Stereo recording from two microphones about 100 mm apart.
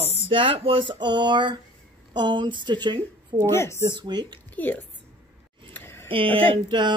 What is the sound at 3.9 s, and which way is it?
Speech, 45° right (ahead or behind).